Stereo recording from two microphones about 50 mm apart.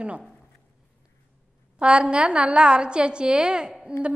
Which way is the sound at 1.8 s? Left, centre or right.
Right.